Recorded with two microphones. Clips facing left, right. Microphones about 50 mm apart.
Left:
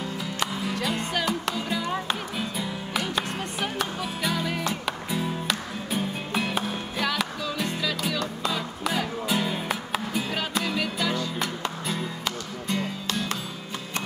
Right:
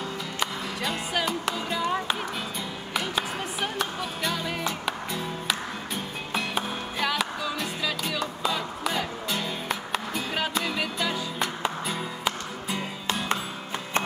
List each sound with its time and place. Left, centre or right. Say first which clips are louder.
0.4 s music: left 2 dB; centre
13.0 s music: right 2 dB; right